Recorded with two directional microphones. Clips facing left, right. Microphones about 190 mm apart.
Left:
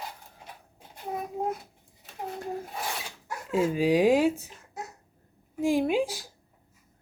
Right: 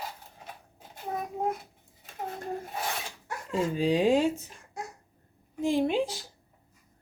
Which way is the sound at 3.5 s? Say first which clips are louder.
Left 3 dB; 5° left (ahead or behind).